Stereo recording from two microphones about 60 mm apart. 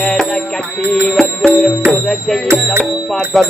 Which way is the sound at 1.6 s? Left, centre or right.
Left.